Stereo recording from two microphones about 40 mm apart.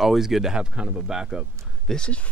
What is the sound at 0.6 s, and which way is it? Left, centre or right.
Speech, right.